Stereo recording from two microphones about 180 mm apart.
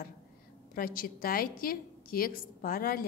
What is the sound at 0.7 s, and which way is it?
A woman's voice, 55° left (ahead or behind).